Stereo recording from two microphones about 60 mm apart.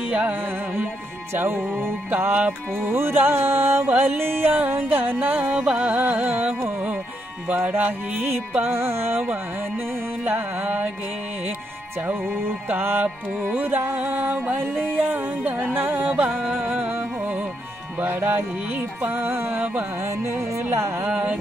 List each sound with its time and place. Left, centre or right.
0.1 s music: right
1.3 s music: right
1.6 s music: right
5.6 s carnatic music: centre
7.4 s music: right
12.1 s music: right
14.5 s music: right
18.0 s music: right
20.2 s speech: right
21.0 s music: right